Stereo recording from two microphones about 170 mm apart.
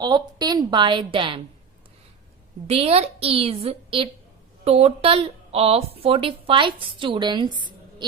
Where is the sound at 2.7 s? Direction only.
35° right (ahead or behind).